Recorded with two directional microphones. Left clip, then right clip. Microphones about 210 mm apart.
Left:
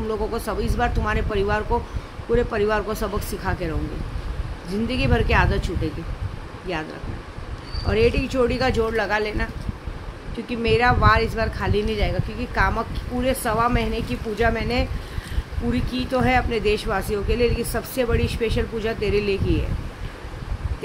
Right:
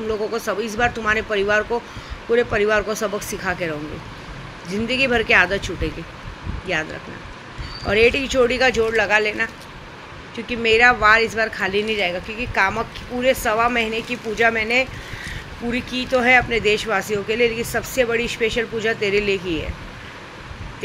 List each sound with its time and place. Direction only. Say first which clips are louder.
0.1 s speech: right 3 dB; 20° left (ahead or behind)
6.7 s speech: right 5 dB; 20° left (ahead or behind)
7.9 s speech: right 4 dB; 15° left (ahead or behind)
10.5 s speech: right 5 dB; 15° left (ahead or behind)